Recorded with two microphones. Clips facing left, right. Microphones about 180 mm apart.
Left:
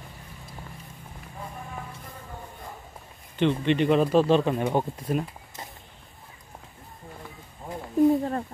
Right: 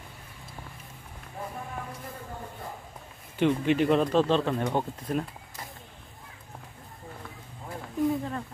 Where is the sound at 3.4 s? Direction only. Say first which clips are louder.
Left 1 dB; 5° right (ahead or behind).